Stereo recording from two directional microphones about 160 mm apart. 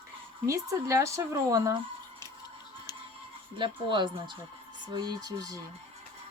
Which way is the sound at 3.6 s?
30° right (ahead or behind).